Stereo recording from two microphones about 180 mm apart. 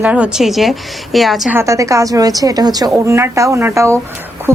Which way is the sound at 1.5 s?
15° right (ahead or behind).